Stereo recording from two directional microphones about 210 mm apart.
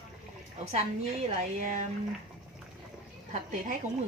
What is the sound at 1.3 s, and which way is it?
Speech, 35° right (ahead or behind).